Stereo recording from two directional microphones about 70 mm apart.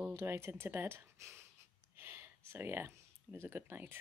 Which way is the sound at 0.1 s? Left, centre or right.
Right.